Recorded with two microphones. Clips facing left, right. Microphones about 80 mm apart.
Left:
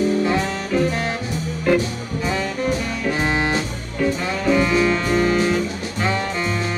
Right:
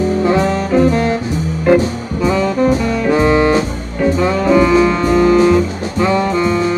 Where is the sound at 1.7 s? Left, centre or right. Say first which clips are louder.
Right 7 dB; right.